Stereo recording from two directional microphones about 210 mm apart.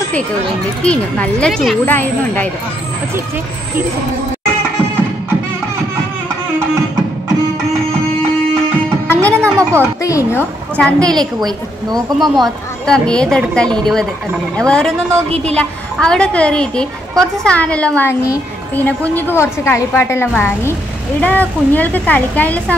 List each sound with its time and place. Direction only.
0.8 s a woman's voice: 5° left (ahead or behind)
9.0 s music: 10° left (ahead or behind)
9.6 s a sound: 15° right (ahead or behind)
10.0 s a woman's voice: 15° left (ahead or behind)
10.8 s a woman's voice: 5° left (ahead or behind)
11.3 s speech: 20° right (ahead or behind)
12.2 s a woman's voice: centre (ahead or behind)